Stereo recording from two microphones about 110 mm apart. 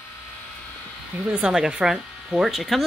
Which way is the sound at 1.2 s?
10° right (ahead or behind).